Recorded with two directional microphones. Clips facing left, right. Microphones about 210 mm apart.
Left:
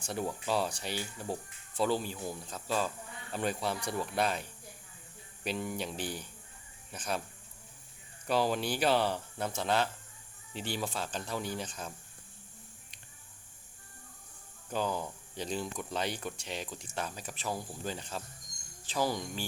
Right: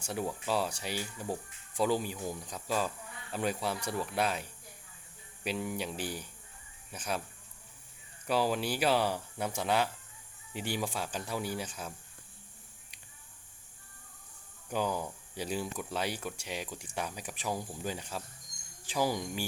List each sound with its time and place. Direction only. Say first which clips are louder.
0.0 s speech: even; 10° right (ahead or behind)
8.3 s speech: even; 5° right (ahead or behind)
14.7 s speech: right 1 dB; 10° right (ahead or behind)